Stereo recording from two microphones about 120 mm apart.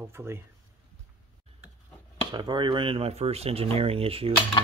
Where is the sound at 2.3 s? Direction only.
40° right (ahead or behind).